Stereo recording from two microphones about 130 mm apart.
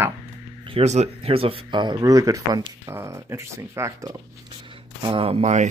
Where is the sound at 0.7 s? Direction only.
60° right (ahead or behind); by 4.2 s 25° right (ahead or behind).